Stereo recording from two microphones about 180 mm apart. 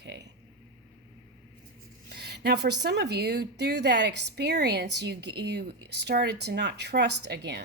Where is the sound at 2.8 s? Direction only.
70° right (ahead or behind).